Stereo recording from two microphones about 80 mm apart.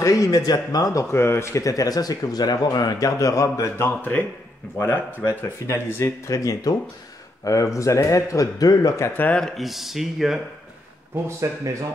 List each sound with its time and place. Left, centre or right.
0.0 s speech: left
1.1 s speech: left
9.0 s speech: left
9.4 s speech: centre
11.2 s speech: right